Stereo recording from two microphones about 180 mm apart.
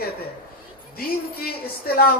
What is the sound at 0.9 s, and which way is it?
Speech, 60° left (ahead or behind).